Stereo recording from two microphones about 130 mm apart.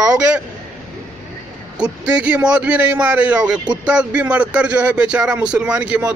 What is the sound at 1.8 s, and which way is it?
Speech, 10° right (ahead or behind).